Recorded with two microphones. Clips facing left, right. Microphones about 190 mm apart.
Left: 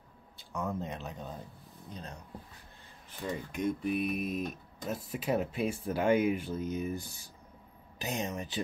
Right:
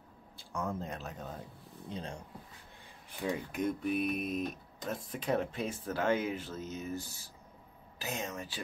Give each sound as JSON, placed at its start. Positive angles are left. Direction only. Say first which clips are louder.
{"t": 0.5, "sound": "speech", "louder": "left 1 dB", "side_deg": 0}
{"t": 1.9, "sound": "speech", "louder": "right 4 dB", "side_deg": -30}
{"t": 3.3, "sound": "speech", "louder": "even", "side_deg": 0}